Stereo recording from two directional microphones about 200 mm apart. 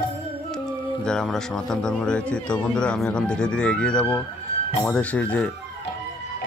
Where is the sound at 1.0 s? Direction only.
5° left (ahead or behind).